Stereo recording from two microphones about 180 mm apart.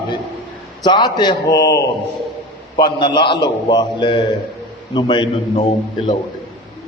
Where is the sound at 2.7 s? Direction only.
25° left (ahead or behind).